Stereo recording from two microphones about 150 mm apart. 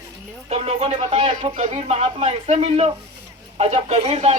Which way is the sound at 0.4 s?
40° right (ahead or behind).